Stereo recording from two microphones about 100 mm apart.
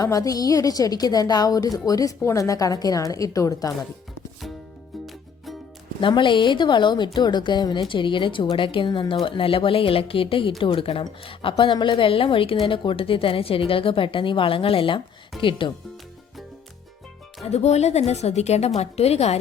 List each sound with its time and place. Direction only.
0.0 s a woman's voice: 35° left (ahead or behind)
6.0 s a woman's voice: 55° left (ahead or behind)
17.4 s a woman's voice: 90° left